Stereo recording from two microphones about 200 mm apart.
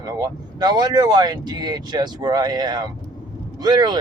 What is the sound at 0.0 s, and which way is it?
Speech, 20° right (ahead or behind).